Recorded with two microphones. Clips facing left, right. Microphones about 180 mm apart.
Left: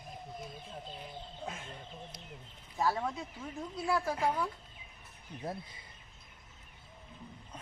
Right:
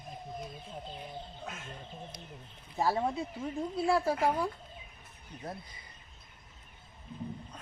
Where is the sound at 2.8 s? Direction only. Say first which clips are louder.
Right 3 dB; 30° right (ahead or behind).